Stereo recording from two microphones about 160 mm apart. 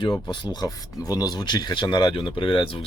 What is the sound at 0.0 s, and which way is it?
Speech, 30° left (ahead or behind).